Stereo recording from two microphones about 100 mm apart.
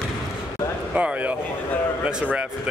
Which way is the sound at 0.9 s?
15° right (ahead or behind).